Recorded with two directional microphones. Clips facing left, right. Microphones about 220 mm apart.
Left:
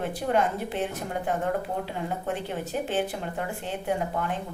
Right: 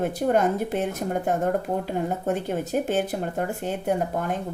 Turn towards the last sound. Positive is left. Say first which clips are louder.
# right 5 dB
turn(degrees=-45)  # may be behind; listen again after turning